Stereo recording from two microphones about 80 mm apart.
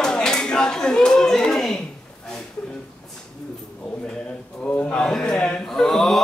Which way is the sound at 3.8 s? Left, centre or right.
Centre.